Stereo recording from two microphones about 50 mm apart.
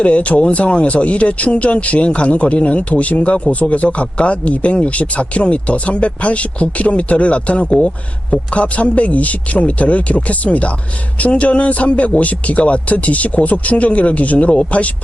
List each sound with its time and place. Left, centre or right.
0.0 s speech: left